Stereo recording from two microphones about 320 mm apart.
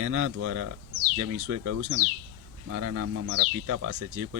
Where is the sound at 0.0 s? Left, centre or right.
Right.